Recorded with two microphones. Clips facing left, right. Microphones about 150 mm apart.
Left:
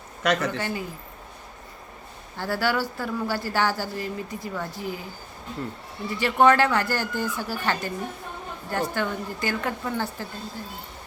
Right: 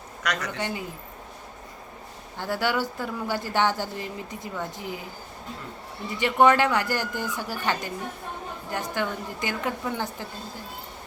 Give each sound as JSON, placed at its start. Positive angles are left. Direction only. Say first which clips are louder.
{"t": 0.2, "sound": "speech", "louder": "left 6 dB", "side_deg": 30}
{"t": 0.5, "sound": "speech", "louder": "left 1 dB", "side_deg": -20}
{"t": 2.4, "sound": "speech", "louder": "left 1 dB", "side_deg": -20}
{"t": 6.1, "sound": "speech", "louder": "left 1 dB", "side_deg": -15}